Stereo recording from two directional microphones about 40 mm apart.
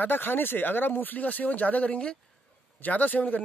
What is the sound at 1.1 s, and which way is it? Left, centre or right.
Speech, left.